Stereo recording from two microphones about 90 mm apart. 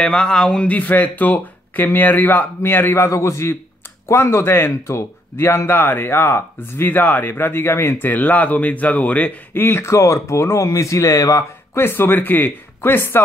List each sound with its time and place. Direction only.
0.0 s a man's voice: 10° left (ahead or behind); by 11.4 s 40° left (ahead or behind)
11.7 s a man's voice: 25° left (ahead or behind)